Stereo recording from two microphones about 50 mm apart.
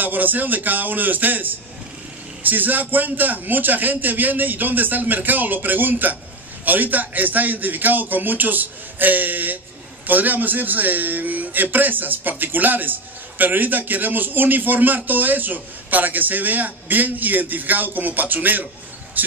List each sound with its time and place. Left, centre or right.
0.0 s a man's voice: right